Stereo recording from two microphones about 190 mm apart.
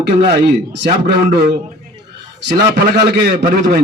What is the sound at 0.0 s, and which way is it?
A man's voice, 65° right (ahead or behind).